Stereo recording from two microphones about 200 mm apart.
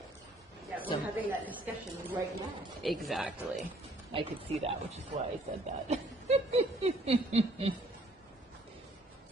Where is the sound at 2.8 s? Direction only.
Centre (ahead or behind).